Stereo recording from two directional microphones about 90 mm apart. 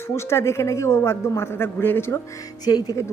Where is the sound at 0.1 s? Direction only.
30° left (ahead or behind).